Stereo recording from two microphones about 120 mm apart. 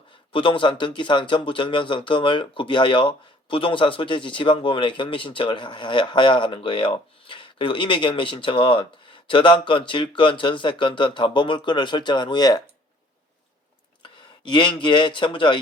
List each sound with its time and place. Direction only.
0.3 s speech: 45° left (ahead or behind)
14.0 s speech: 40° left (ahead or behind)